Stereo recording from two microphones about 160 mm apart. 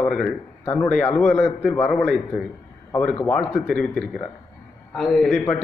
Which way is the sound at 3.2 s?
5° left (ahead or behind).